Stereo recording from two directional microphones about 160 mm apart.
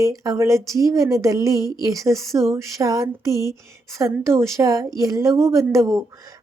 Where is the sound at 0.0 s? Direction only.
20° right (ahead or behind).